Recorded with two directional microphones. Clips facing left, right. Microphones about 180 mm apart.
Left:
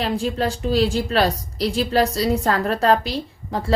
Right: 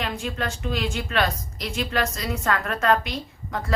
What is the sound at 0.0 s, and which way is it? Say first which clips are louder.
A woman's voice: left 7 dB; 35° left (ahead or behind).